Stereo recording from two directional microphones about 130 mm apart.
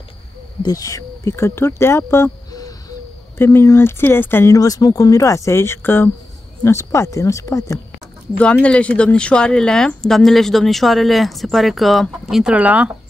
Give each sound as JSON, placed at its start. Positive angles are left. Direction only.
{"t": 0.6, "sound": "speech", "side_deg": 30}
{"t": 4.6, "sound": "speech", "side_deg": 30}
{"t": 8.4, "sound": "speech", "side_deg": 10}